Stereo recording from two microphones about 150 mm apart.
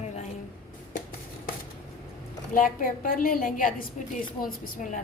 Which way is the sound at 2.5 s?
65° left (ahead or behind).